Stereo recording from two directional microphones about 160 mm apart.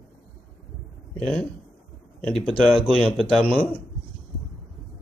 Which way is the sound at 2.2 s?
5° left (ahead or behind).